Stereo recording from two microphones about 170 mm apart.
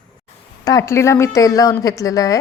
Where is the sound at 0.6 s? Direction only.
20° left (ahead or behind).